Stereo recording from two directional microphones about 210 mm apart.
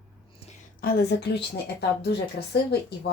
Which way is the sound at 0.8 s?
50° left (ahead or behind).